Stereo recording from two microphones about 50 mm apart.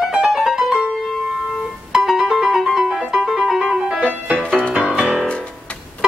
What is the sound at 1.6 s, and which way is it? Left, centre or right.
Music, centre.